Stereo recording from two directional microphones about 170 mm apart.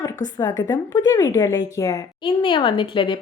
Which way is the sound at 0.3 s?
20° left (ahead or behind).